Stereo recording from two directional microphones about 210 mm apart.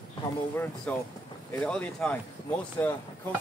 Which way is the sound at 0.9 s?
5° left (ahead or behind).